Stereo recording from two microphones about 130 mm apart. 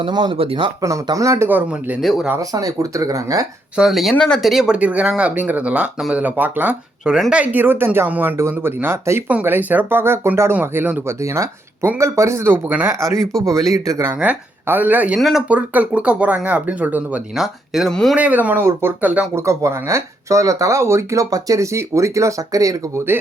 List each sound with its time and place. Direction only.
0.0 s speech: 35° right (ahead or behind)
0.8 s speech: 25° right (ahead or behind)
1.5 s speech: 15° right (ahead or behind)
2.0 s speech: centre (ahead or behind)
2.5 s speech: 25° right (ahead or behind)
3.8 s speech: centre (ahead or behind); by 14.1 s 25° right (ahead or behind)
14.2 s speech: 15° right (ahead or behind)
18.2 s speech: 10° right (ahead or behind)
19.5 s speech: 25° right (ahead or behind)